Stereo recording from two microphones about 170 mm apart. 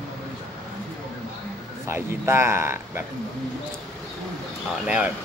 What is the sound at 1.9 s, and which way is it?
Speech, 15° right (ahead or behind).